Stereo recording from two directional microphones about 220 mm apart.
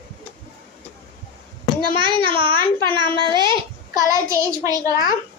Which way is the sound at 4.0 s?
15° right (ahead or behind).